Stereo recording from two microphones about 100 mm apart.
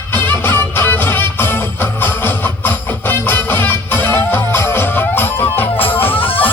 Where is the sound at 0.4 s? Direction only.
20° left (ahead or behind).